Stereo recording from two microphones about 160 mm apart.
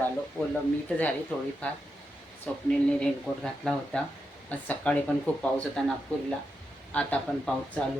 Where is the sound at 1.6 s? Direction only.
10° left (ahead or behind).